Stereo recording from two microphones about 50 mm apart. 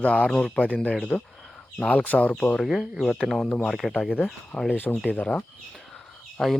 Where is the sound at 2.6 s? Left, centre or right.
Centre.